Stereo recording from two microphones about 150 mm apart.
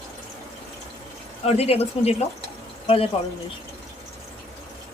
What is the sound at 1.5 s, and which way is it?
Speech, 45° left (ahead or behind).